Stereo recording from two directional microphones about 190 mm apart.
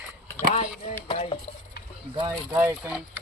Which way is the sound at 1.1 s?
25° left (ahead or behind).